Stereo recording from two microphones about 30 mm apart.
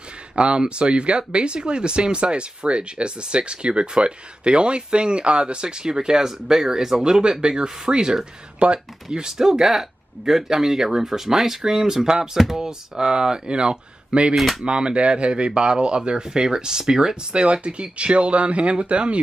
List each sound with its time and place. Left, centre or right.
0.4 s speech: right
9.4 s speech: centre; by 14.3 s right
14.3 s speech: centre
14.6 s speech: right
17.3 s speech: right